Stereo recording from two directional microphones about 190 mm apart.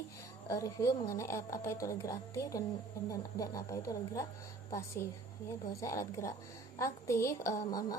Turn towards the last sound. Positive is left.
turn(degrees=20)  # may be behind; listen again after turning